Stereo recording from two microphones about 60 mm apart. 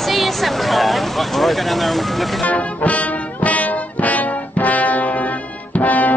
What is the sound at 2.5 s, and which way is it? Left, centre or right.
Brass instrument, left.